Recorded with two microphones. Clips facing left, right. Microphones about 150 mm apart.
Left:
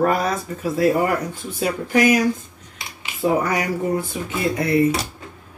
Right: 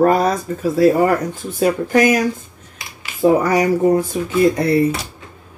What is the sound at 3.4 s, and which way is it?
Speech, 40° right (ahead or behind).